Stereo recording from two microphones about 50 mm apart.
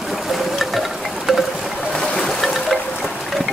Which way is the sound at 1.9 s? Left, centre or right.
Centre.